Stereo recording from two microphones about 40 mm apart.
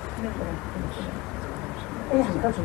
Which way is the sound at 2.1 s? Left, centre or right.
Centre.